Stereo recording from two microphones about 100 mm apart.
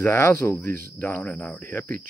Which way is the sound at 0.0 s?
25° left (ahead or behind).